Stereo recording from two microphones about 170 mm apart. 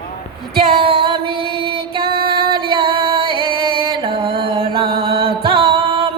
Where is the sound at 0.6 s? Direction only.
30° right (ahead or behind).